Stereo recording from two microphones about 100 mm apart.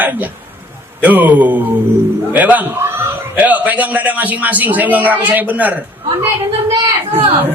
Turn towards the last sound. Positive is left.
turn(degrees=-60)  # may be behind; listen again after turning